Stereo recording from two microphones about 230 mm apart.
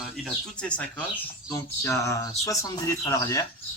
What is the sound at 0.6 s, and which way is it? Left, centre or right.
Speech, centre.